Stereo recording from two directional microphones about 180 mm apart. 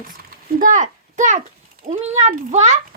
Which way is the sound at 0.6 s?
45° right (ahead or behind).